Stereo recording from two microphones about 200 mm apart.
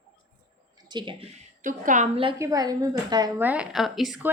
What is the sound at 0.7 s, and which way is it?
Speech, 25° right (ahead or behind).